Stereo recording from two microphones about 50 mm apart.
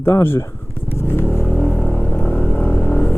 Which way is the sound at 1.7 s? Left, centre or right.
Left.